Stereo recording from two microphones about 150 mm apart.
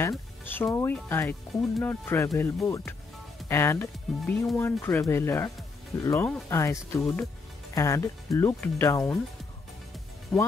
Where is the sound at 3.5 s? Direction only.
15° left (ahead or behind).